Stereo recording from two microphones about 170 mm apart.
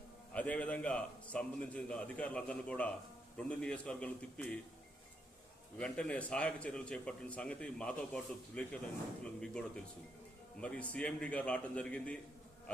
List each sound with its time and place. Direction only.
0.3 s a man's voice: 10° left (ahead or behind)
5.7 s a man's voice: 5° left (ahead or behind)